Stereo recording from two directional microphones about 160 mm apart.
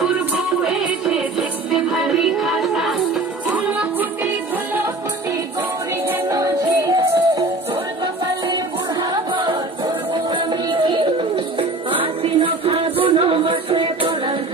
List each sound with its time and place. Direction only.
0.6 s music: 5° right (ahead or behind)
6.0 s music: 20° right (ahead or behind)
9.0 s music: 25° right (ahead or behind)